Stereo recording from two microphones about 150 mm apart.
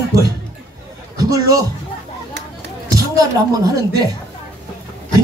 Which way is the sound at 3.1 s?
25° right (ahead or behind).